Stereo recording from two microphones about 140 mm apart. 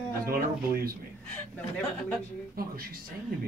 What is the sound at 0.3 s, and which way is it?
Speech, 90° right.